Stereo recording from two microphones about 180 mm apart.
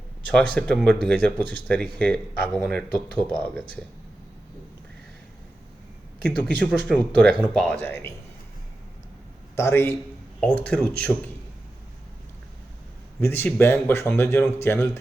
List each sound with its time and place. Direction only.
0.5 s speech: 5° left (ahead or behind)
6.6 s speech: 5° left (ahead or behind)
9.6 s speech: 15° left (ahead or behind)
13.1 s speech: 10° left (ahead or behind)